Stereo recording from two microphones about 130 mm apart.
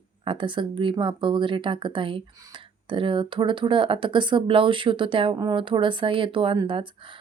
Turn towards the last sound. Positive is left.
turn(degrees=-40)  # may be behind; listen again after turning